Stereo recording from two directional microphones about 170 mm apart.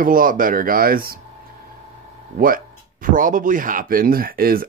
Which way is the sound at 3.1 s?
50° right (ahead or behind).